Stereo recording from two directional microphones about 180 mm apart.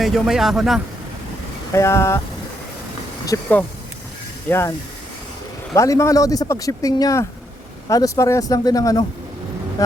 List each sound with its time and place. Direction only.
0.0 s speech: centre (ahead or behind)
1.7 s speech: 15° left (ahead or behind)
3.2 s speech: 15° left (ahead or behind)
5.7 s speech: 15° left (ahead or behind)